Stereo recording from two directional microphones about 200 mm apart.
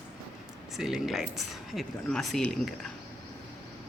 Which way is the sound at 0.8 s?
Centre (ahead or behind).